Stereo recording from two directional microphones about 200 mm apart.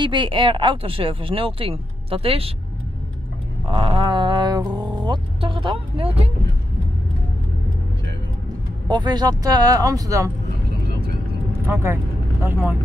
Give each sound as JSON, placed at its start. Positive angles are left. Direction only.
{"t": 0.0, "sound": "speech", "side_deg": -25}
{"t": 3.6, "sound": "speech", "side_deg": -25}
{"t": 8.8, "sound": "speech", "side_deg": -20}
{"t": 11.6, "sound": "speech", "side_deg": -10}